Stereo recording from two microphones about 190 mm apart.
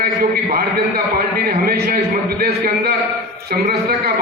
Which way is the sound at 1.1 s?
55° right (ahead or behind).